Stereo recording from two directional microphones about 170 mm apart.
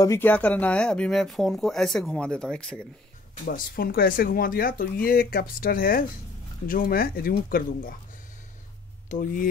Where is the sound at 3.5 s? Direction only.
60° left (ahead or behind).